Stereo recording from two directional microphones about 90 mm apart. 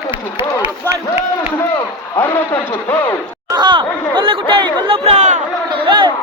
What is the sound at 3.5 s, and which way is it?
Speech, 60° right (ahead or behind).